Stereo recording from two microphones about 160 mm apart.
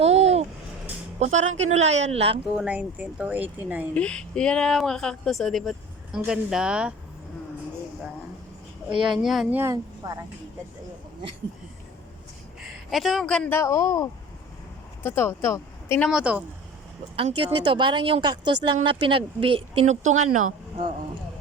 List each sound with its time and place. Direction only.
0.0 s a sound: 40° right (ahead or behind)
1.2 s a woman's voice: 45° right (ahead or behind)
2.6 s speech: 5° right (ahead or behind)
3.9 s speech: 5° left (ahead or behind)
9.0 s speech: centre (ahead or behind)
9.6 s speech: 20° right (ahead or behind)
12.5 s a woman's voice: centre (ahead or behind)
13.6 s a man's voice: 20° left (ahead or behind)
16.0 s speech: 5° right (ahead or behind)
17.2 s speech: 35° right (ahead or behind)